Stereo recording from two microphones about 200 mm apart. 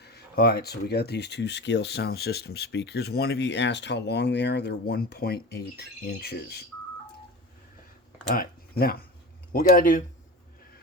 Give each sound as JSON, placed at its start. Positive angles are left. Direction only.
{"t": 0.0, "sound": "speech", "side_deg": 50}
{"t": 8.3, "sound": "speech", "side_deg": 45}